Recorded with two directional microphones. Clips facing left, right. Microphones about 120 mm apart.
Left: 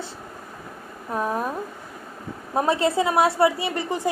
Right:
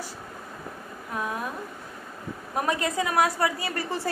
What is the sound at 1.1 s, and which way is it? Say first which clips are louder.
Speech: left 6 dB; 35° left (ahead or behind).